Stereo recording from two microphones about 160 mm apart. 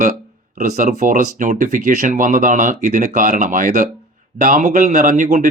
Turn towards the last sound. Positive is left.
turn(degrees=-50)  # may be behind; listen again after turning